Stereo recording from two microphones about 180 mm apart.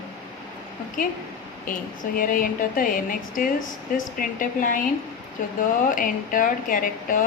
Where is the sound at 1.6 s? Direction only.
50° left (ahead or behind).